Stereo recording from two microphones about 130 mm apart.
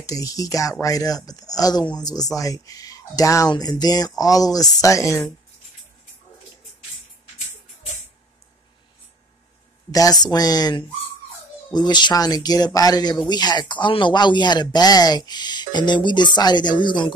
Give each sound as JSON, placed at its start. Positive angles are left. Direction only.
{"t": 0.0, "sound": "speech", "side_deg": 25}
{"t": 9.8, "sound": "speech", "side_deg": 30}